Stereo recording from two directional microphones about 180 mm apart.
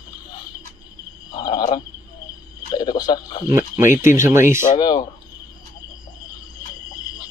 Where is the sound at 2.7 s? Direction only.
20° left (ahead or behind).